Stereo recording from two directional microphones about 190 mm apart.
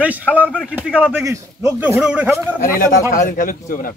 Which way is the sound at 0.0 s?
10° right (ahead or behind).